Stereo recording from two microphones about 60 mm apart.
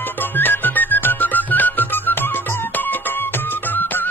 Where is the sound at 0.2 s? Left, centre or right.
Left.